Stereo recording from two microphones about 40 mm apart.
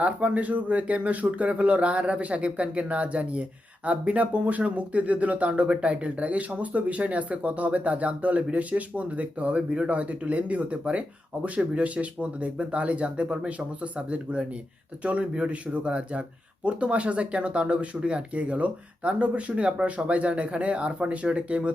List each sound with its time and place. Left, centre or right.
0.0 s speech: right
15.0 s speech: right